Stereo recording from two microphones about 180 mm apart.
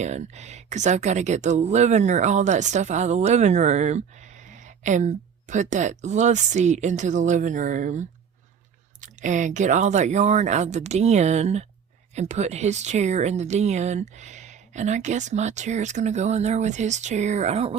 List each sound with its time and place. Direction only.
0.0 s speech: 40° right (ahead or behind)